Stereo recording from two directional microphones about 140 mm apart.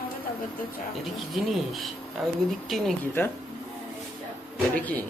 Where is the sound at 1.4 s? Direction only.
Centre (ahead or behind).